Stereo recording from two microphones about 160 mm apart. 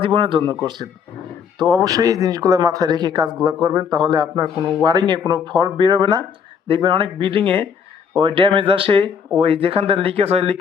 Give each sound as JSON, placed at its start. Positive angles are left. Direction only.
{"t": 0.0, "sound": "speech", "side_deg": -35}